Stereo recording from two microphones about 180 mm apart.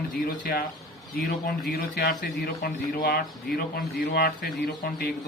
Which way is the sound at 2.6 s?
60° left (ahead or behind).